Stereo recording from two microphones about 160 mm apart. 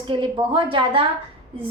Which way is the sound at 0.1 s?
30° right (ahead or behind).